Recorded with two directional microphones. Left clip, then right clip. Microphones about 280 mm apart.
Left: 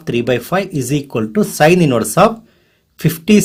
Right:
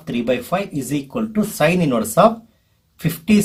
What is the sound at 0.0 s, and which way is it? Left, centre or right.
Speech, left.